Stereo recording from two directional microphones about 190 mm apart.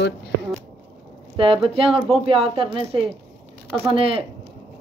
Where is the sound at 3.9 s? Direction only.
30° right (ahead or behind).